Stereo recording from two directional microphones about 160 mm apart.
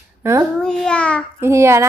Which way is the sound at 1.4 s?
15° right (ahead or behind).